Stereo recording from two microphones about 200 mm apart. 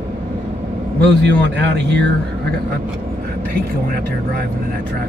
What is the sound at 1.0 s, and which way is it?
Speech, 60° right (ahead or behind).